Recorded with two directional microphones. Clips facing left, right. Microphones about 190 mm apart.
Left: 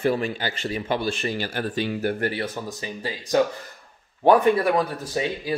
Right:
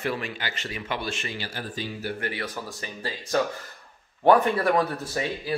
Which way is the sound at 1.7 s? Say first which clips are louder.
Left 7 dB; 65° left (ahead or behind).